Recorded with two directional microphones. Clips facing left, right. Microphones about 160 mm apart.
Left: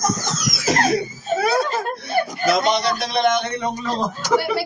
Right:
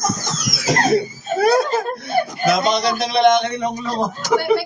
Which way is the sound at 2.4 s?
15° right (ahead or behind).